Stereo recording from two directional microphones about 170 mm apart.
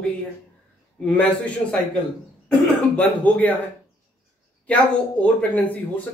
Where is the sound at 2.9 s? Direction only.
10° left (ahead or behind).